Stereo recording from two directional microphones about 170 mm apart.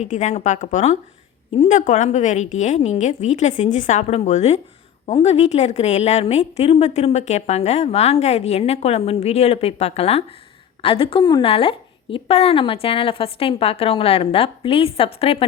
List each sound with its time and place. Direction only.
0.0 s a woman's voice: 45° left (ahead or behind)